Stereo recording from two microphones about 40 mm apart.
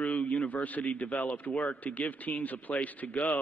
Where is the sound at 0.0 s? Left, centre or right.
Left.